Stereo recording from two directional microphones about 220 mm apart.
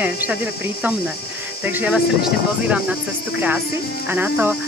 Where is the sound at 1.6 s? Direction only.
5° right (ahead or behind).